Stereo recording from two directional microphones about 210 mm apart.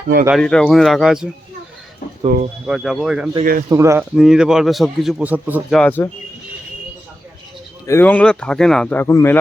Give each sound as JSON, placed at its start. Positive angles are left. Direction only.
{"t": 0.3, "sound": "speech", "side_deg": 5}
{"t": 2.3, "sound": "speech", "side_deg": -45}
{"t": 2.6, "sound": "speech", "side_deg": 0}
{"t": 3.7, "sound": "speech", "side_deg": -15}
{"t": 4.1, "sound": "speech", "side_deg": 0}
{"t": 5.8, "sound": "a man's voice", "side_deg": 10}
{"t": 7.9, "sound": "a man's voice", "side_deg": 10}